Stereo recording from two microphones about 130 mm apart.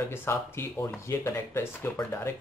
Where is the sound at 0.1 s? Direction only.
15° left (ahead or behind).